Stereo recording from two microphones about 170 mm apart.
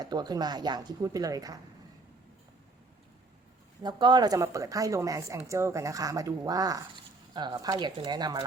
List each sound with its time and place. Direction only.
0.0 s speech: 25° right (ahead or behind)
3.8 s speech: 25° right (ahead or behind)